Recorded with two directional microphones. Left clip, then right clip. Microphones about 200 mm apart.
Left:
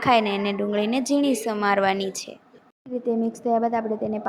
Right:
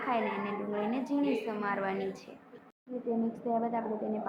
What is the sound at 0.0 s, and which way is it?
A woman's voice, 50° left (ahead or behind).